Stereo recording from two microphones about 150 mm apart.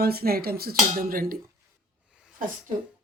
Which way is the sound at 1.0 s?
75° right (ahead or behind).